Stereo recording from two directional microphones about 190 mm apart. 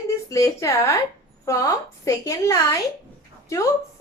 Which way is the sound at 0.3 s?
15° left (ahead or behind).